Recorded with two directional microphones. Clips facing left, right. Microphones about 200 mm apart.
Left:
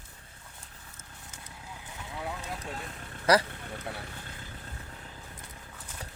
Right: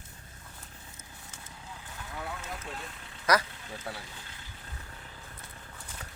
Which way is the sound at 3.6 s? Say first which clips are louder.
Left 2 dB; 60° left (ahead or behind).